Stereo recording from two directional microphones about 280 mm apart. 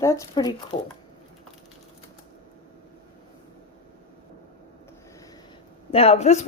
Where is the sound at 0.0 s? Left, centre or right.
Centre.